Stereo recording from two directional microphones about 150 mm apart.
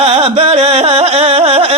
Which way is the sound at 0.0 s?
40° right (ahead or behind).